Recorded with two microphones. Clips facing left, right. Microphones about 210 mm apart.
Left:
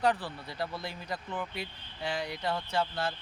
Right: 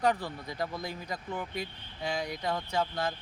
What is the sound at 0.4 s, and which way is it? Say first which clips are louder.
Speech: right 1 dB; 15° right (ahead or behind).